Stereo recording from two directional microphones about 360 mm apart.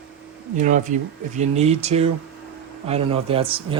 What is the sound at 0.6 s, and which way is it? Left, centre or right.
Speech, right.